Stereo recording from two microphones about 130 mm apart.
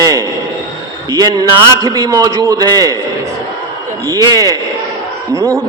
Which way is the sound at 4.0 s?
30° right (ahead or behind).